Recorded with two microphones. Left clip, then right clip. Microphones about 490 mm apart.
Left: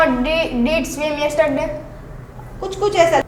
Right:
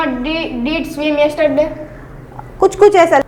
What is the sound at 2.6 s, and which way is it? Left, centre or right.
Speech, right.